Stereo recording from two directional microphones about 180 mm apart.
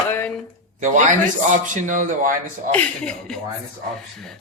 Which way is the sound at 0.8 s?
45° right (ahead or behind).